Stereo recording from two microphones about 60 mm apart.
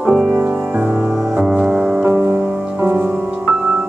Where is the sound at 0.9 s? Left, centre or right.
Centre.